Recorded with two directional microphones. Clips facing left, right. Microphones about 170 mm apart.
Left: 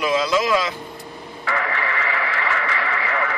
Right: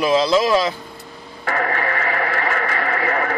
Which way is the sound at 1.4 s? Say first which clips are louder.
Right 3 dB; 45° right (ahead or behind).